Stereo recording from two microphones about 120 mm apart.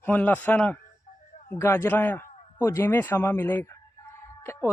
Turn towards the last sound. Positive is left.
turn(degrees=20)  # may be behind; listen again after turning